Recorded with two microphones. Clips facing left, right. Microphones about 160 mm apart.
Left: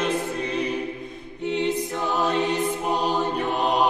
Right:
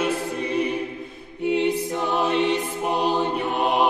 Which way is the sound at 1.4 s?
10° right (ahead or behind).